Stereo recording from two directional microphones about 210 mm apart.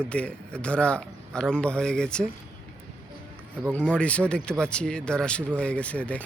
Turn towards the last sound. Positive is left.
turn(degrees=5)  # may be behind; listen again after turning